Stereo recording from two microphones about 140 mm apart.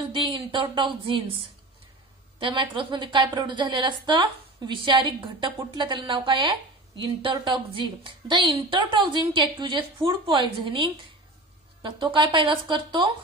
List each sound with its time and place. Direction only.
0.1 s a woman's voice: 35° right (ahead or behind)
2.4 s a woman's voice: 35° right (ahead or behind)